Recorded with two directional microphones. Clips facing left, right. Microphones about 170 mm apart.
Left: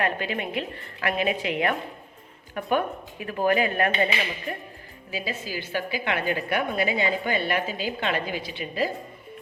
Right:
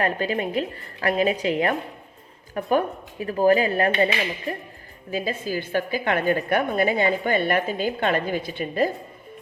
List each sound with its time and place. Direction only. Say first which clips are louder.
0.0 s a woman's voice: right 3 dB; 40° right (ahead or behind)
5.1 s a woman's voice: right 6 dB; 50° right (ahead or behind)